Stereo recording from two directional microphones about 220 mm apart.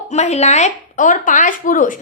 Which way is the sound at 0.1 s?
30° left (ahead or behind).